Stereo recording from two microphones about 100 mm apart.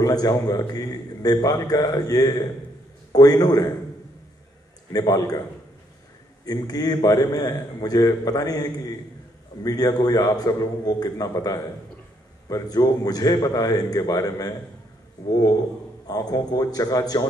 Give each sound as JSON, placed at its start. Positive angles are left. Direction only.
{"t": 0.0, "sound": "a man's voice", "side_deg": 40}
{"t": 4.9, "sound": "a man's voice", "side_deg": 35}
{"t": 6.4, "sound": "a man's voice", "side_deg": 40}
{"t": 16.1, "sound": "a man's voice", "side_deg": 40}